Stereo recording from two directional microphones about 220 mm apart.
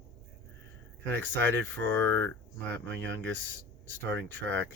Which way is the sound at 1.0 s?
10° left (ahead or behind).